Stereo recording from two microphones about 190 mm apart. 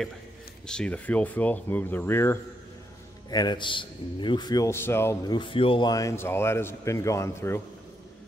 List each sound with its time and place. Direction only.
0.7 s a man's voice: 5° left (ahead or behind)
3.3 s a man's voice: 20° left (ahead or behind)